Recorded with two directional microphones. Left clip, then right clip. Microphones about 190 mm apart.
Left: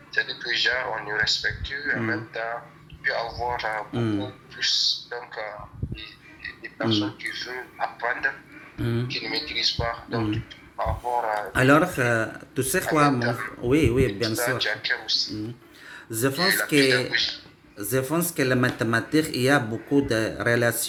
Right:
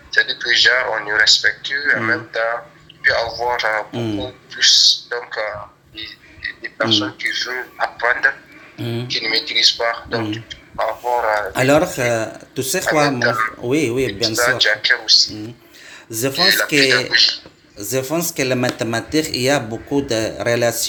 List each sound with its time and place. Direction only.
0.1 s a man's voice: 35° right (ahead or behind)
3.9 s speech: 15° left (ahead or behind)
4.2 s a man's voice: 35° right (ahead or behind)
8.8 s speech: 15° left (ahead or behind)
9.0 s a man's voice: 35° right (ahead or behind)
11.5 s speech: 10° left (ahead or behind)
13.1 s a man's voice: 35° right (ahead or behind)
13.7 s speech: 10° left (ahead or behind)
14.6 s a man's voice: 35° right (ahead or behind)
16.0 s speech: 15° left (ahead or behind)
16.4 s a man's voice: 35° right (ahead or behind)
16.6 s speech: 10° left (ahead or behind)
17.1 s a man's voice: 35° right (ahead or behind)
17.7 s speech: 15° left (ahead or behind)